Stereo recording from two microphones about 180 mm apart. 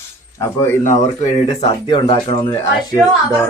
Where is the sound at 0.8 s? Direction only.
45° left (ahead or behind).